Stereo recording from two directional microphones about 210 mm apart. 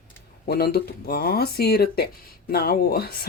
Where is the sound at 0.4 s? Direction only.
45° left (ahead or behind).